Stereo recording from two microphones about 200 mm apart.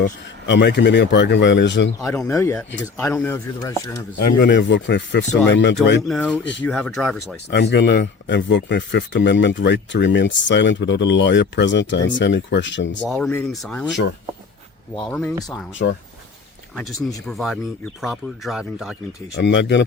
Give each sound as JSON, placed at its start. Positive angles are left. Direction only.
{"t": 0.0, "sound": "speech", "side_deg": 60}
{"t": 2.0, "sound": "speech", "side_deg": 15}
{"t": 4.4, "sound": "speech", "side_deg": 60}
{"t": 6.0, "sound": "speech", "side_deg": 0}
{"t": 7.5, "sound": "speech", "side_deg": 60}
{"t": 13.1, "sound": "speech", "side_deg": 5}
{"t": 15.1, "sound": "speech", "side_deg": 5}
{"t": 15.8, "sound": "speech", "side_deg": 65}
{"t": 17.2, "sound": "speech", "side_deg": 0}
{"t": 19.4, "sound": "speech", "side_deg": 60}